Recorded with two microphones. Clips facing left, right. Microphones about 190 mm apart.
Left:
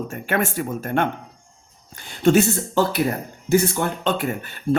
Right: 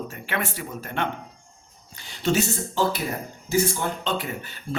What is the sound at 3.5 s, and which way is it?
Speech, 60° left (ahead or behind).